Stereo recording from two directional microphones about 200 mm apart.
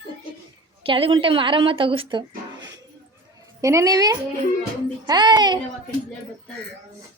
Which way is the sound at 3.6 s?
15° right (ahead or behind).